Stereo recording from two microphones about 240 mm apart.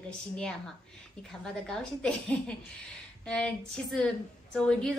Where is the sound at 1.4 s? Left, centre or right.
Centre.